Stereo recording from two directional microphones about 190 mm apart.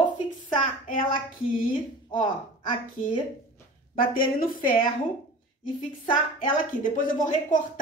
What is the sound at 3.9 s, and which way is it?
Speech, 50° left (ahead or behind).